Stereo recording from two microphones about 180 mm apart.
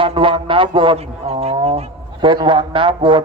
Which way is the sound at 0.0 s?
30° right (ahead or behind).